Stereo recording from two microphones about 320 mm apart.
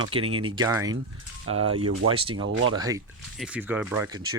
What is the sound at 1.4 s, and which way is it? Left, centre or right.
Speech, right.